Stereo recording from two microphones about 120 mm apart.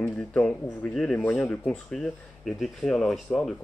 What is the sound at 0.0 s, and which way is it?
Speech, 5° left (ahead or behind).